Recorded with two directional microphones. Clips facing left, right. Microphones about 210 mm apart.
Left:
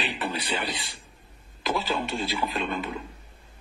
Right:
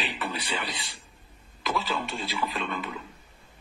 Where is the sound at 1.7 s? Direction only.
30° left (ahead or behind).